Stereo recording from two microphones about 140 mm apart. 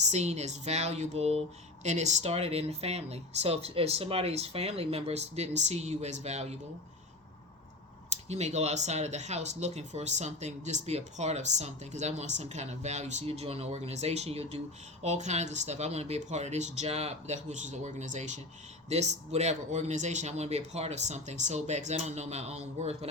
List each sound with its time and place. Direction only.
0.0 s speech: 55° right (ahead or behind)
8.1 s speech: 50° right (ahead or behind)